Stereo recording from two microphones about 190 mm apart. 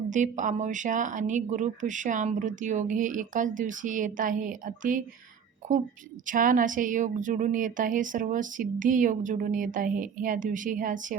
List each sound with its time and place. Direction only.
0.1 s a woman's voice: 40° right (ahead or behind)